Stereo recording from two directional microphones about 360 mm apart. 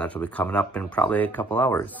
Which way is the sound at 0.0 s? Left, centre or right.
Centre.